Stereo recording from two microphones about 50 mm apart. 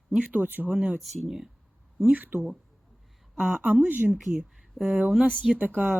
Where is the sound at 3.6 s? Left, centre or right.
Right.